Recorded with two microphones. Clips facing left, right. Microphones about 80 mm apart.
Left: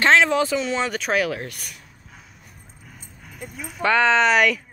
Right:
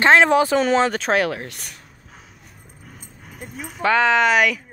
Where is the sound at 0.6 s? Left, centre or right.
Right.